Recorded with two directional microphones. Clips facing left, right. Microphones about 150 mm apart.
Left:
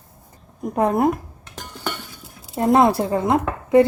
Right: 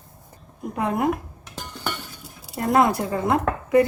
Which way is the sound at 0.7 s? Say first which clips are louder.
Left 5 dB; 40° left (ahead or behind).